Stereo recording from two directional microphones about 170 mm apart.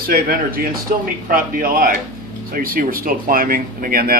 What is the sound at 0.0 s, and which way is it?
Speech, 60° right (ahead or behind).